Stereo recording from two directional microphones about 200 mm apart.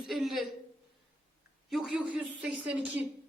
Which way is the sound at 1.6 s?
Centre (ahead or behind).